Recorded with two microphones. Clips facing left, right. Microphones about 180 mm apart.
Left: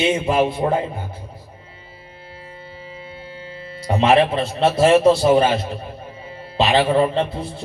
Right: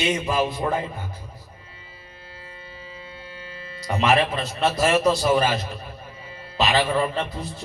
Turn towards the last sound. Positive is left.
turn(degrees=30)  # may be behind; listen again after turning